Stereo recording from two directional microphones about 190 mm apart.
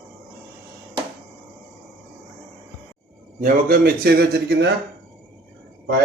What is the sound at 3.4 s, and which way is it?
A man's voice, 50° right (ahead or behind).